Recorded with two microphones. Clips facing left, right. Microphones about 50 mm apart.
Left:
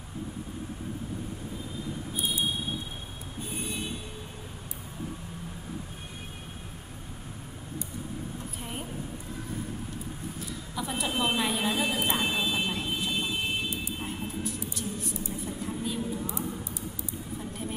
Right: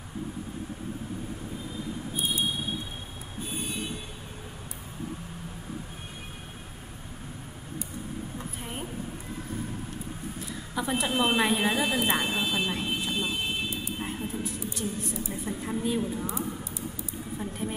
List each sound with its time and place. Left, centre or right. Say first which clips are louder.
10.7 s speech: right 4 dB; centre
11.9 s a woman's voice: right 2 dB; right
12.4 s vehicle: right 1 dB; centre
15.6 s a woman's voice: right 5 dB; right